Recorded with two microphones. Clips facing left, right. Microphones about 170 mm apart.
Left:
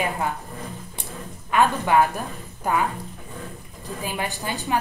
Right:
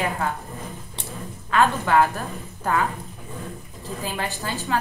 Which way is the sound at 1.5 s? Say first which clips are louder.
Even; 15° left (ahead or behind).